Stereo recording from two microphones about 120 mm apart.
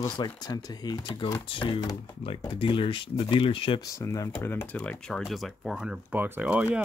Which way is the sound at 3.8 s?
25° left (ahead or behind).